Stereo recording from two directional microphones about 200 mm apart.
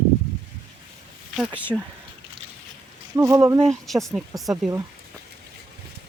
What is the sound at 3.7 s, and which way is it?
Speech, centre (ahead or behind).